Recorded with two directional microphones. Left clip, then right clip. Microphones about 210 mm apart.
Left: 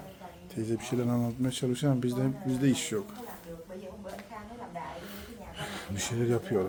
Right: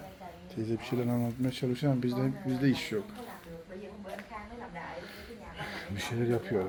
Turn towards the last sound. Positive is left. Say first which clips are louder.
# left 2 dB
turn(degrees=5)  # may be behind; listen again after turning